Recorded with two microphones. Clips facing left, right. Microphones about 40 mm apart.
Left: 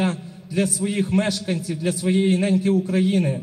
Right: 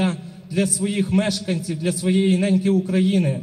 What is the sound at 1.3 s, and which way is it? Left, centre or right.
Speech, centre.